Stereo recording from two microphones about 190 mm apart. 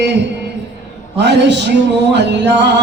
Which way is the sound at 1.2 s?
65° right (ahead or behind).